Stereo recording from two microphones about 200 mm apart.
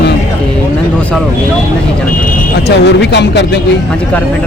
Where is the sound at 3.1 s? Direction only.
60° left (ahead or behind).